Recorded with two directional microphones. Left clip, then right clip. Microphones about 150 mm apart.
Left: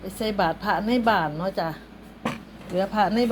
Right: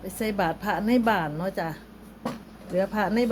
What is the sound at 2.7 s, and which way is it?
Speech, 30° right (ahead or behind).